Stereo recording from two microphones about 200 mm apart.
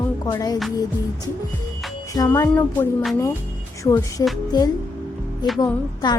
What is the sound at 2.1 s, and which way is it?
Speech, 15° left (ahead or behind).